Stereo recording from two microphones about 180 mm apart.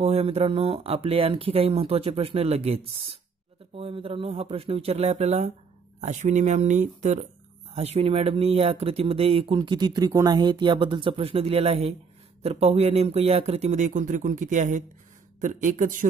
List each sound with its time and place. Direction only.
0.0 s speech: 35° right (ahead or behind)